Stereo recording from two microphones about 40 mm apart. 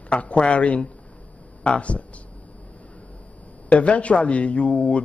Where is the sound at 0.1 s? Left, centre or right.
Left.